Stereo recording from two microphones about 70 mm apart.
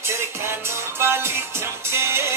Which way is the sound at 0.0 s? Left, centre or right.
Right.